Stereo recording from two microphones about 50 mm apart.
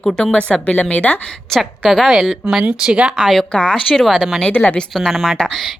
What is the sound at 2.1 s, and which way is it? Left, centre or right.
Speech, centre.